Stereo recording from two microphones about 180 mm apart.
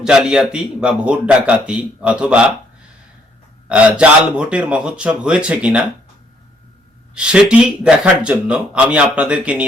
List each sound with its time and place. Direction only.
0.0 s speech: 5° right (ahead or behind)
3.7 s speech: 5° right (ahead or behind)
7.1 s speech: 5° right (ahead or behind)